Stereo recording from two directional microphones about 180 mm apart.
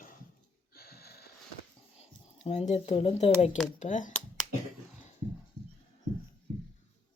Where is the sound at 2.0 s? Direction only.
35° left (ahead or behind).